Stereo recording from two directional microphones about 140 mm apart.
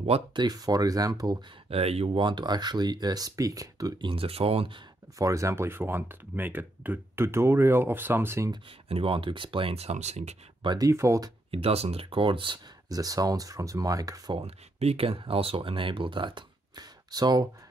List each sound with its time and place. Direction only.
0.3 s speech: 30° right (ahead or behind)
1.7 s speech: 45° right (ahead or behind)
2.2 s speech: 30° right (ahead or behind)
4.1 s speech: 45° right (ahead or behind)
5.2 s speech: 20° right (ahead or behind)
8.8 s speech: 40° right (ahead or behind)
10.6 s speech: 30° right (ahead or behind)
11.5 s speech: 45° right (ahead or behind); by 14.4 s 25° right (ahead or behind)
14.4 s speech: 45° right (ahead or behind); by 17.5 s 30° right (ahead or behind)